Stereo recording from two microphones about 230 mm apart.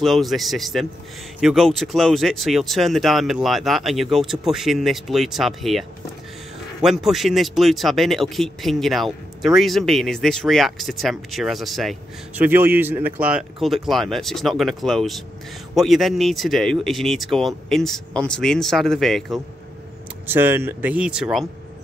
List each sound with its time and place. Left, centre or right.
0.0 s speech: centre
20.2 s speech: centre